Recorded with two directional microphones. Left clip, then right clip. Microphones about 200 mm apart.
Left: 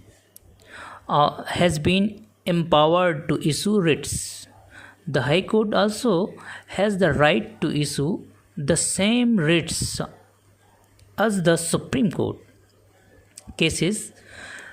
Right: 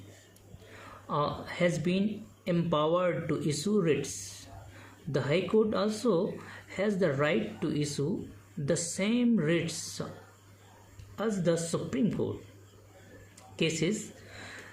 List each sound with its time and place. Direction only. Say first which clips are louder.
0.8 s speech: left 12 dB; 45° left (ahead or behind)
5.1 s speech: left 7 dB; 40° left (ahead or behind)
11.1 s speech: left 10 dB; 45° left (ahead or behind)
13.3 s a sound: left 8 dB; 40° left (ahead or behind)